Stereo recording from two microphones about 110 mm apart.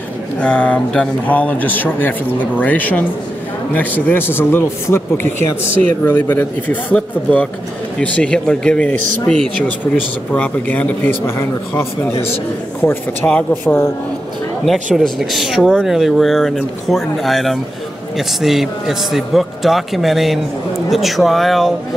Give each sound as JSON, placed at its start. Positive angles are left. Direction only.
{"t": 0.4, "sound": "a man's voice", "side_deg": 10}
{"t": 14.6, "sound": "speech", "side_deg": 0}